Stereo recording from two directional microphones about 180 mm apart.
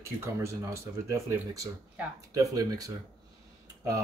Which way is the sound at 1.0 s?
15° right (ahead or behind).